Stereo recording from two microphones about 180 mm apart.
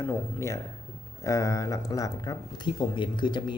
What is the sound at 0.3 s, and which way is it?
Speech, 15° left (ahead or behind).